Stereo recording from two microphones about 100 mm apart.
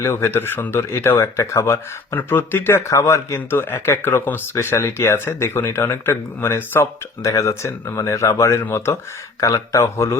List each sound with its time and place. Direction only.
0.0 s speech: 25° left (ahead or behind)